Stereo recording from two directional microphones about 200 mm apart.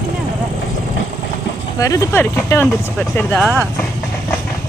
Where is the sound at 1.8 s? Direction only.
15° left (ahead or behind).